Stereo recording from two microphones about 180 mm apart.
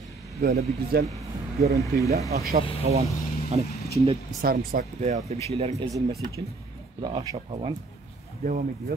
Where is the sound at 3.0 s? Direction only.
40° right (ahead or behind).